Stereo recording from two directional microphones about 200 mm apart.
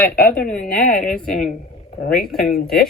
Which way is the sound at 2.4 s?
50° left (ahead or behind).